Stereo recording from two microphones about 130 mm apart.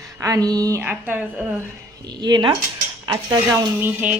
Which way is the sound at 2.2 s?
35° right (ahead or behind).